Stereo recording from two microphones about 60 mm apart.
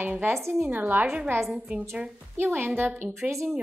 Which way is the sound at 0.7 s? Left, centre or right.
Right.